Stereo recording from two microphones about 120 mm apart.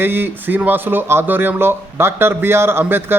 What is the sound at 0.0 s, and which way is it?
Speech, 20° right (ahead or behind).